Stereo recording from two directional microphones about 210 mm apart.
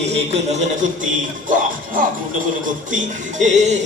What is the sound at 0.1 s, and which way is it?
Music, 30° right (ahead or behind).